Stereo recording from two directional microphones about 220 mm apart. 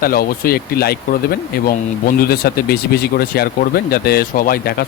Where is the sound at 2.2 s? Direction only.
45° left (ahead or behind).